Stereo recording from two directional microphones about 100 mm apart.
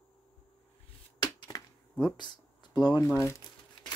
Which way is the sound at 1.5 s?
45° left (ahead or behind).